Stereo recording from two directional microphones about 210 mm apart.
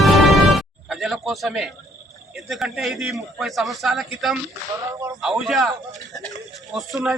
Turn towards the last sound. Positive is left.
turn(degrees=0)  # may be behind; listen again after turning